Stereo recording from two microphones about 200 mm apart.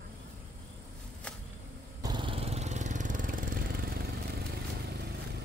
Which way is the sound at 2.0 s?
20° right (ahead or behind).